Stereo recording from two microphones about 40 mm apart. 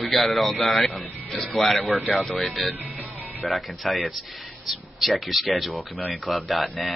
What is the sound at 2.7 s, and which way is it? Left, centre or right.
Music, right.